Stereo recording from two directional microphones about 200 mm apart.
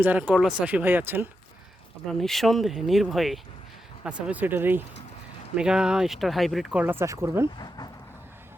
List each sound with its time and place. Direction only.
0.0 s speech: 10° right (ahead or behind)
2.0 s speech: centre (ahead or behind); by 7.4 s 15° right (ahead or behind)
7.4 s speech: 20° left (ahead or behind)